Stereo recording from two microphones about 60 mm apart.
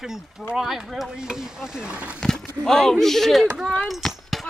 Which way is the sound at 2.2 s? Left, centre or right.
Centre.